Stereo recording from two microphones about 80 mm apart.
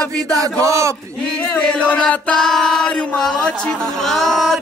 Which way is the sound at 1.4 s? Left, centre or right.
Centre.